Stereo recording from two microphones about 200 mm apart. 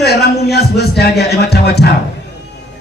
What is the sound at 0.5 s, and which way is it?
A man's voice, 55° left (ahead or behind).